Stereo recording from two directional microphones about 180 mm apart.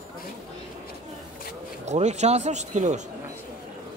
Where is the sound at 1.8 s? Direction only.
40° right (ahead or behind).